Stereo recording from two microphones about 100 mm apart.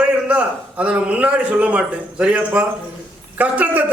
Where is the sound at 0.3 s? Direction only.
15° right (ahead or behind).